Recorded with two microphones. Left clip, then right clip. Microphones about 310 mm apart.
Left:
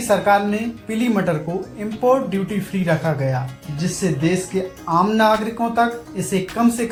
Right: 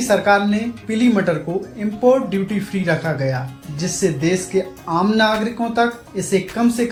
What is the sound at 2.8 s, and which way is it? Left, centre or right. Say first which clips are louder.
Speech: even; centre.